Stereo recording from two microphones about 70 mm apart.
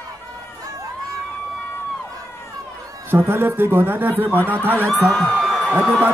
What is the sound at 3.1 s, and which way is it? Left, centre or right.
Speech, right.